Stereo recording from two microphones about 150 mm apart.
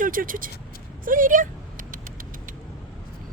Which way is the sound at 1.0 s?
65° right (ahead or behind).